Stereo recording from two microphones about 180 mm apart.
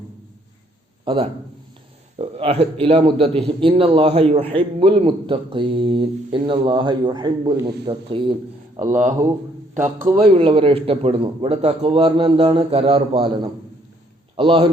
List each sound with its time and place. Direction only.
1.0 s a man's voice: 30° right (ahead or behind)
10.2 s a man's voice: 30° right (ahead or behind)